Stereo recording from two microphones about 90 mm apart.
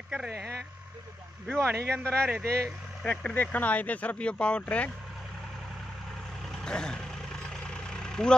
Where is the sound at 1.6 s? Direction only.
20° right (ahead or behind).